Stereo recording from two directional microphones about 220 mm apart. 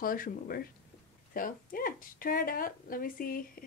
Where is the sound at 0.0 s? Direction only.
40° left (ahead or behind).